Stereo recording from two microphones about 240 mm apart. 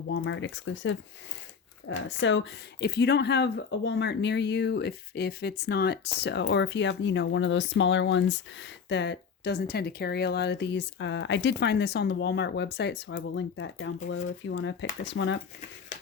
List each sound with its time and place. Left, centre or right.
0.1 s speech: left
2.0 s speech: left